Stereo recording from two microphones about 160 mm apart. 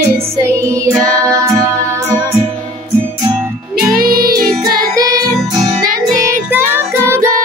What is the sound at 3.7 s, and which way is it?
Music, 65° right (ahead or behind).